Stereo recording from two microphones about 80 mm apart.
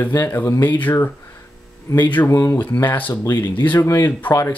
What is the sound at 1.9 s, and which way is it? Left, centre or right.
Speech, left.